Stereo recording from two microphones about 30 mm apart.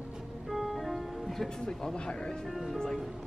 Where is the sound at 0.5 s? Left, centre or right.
Centre.